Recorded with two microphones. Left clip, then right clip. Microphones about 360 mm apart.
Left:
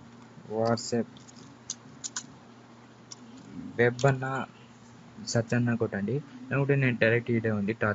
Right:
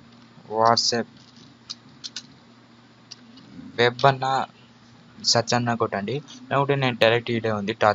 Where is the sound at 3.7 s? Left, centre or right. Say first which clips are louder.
Right 6 dB; right.